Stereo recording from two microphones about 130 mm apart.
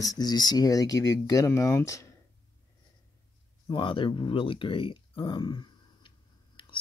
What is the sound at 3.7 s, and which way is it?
Speech, 40° left (ahead or behind).